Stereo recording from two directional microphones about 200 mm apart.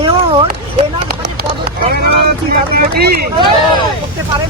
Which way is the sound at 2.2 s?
50° right (ahead or behind).